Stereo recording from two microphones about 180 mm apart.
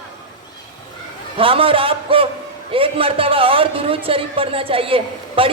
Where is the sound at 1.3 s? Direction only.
30° right (ahead or behind).